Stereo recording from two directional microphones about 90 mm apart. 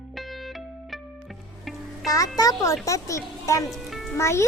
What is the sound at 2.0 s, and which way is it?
A child's voice, 40° left (ahead or behind).